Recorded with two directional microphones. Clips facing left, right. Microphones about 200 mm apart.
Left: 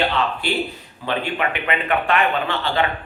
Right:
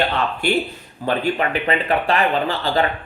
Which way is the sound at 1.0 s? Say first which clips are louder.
Right 3 dB; 40° right (ahead or behind).